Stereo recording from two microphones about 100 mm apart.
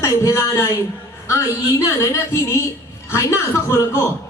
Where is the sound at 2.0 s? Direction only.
30° left (ahead or behind).